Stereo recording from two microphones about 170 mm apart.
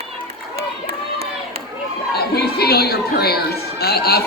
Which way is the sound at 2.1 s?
70° left (ahead or behind).